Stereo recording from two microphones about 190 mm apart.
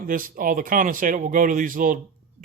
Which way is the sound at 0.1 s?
45° right (ahead or behind).